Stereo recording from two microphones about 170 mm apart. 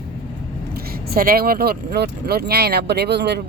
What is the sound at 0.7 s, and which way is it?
Speech, 65° right (ahead or behind).